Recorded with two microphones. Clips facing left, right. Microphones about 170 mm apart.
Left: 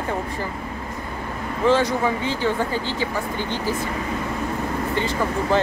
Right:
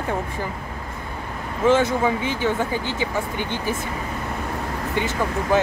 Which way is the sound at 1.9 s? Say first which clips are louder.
Right 1 dB; 15° right (ahead or behind).